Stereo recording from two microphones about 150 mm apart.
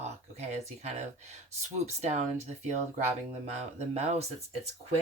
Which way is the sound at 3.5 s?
50° right (ahead or behind).